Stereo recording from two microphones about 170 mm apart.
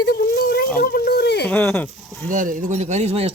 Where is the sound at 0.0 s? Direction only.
70° left (ahead or behind).